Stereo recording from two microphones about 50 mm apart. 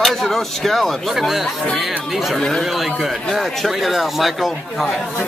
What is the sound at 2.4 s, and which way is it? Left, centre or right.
Speech, centre.